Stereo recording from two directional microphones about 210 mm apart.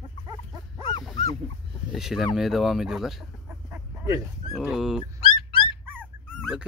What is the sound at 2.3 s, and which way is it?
Chicken, centre (ahead or behind).